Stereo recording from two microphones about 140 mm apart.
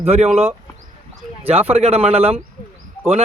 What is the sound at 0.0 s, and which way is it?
Speech, 45° right (ahead or behind).